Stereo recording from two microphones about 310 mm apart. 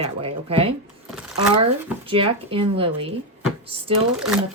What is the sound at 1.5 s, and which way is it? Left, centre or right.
Speech, centre.